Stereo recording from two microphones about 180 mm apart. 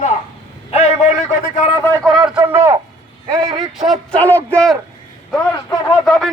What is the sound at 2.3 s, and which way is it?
Speech, 10° right (ahead or behind).